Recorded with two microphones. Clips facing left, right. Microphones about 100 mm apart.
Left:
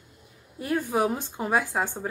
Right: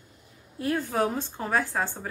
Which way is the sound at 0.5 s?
15° left (ahead or behind).